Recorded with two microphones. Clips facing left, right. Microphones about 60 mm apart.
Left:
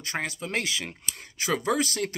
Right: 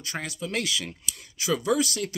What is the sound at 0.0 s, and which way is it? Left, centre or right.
Speech, left.